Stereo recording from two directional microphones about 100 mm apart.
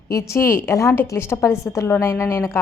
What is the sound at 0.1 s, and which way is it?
A woman's voice, 30° left (ahead or behind).